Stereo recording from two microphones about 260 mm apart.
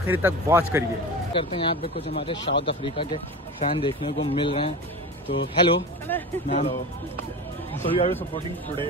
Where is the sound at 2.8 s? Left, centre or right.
Centre.